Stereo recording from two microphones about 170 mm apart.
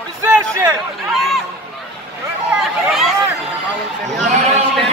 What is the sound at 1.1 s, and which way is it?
Speech, centre (ahead or behind).